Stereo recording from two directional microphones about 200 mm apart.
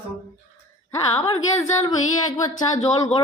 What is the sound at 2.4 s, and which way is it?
Speech, 15° left (ahead or behind).